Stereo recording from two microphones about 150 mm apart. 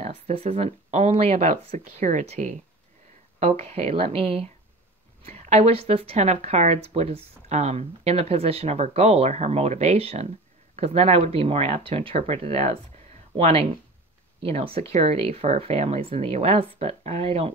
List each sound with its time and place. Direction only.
0.0 s a woman's voice: 40° right (ahead or behind)